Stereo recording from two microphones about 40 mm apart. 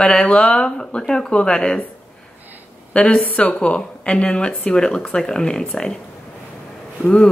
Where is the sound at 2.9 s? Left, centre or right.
Left.